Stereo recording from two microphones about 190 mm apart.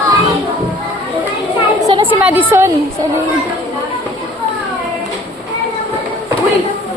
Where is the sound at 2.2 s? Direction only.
10° right (ahead or behind).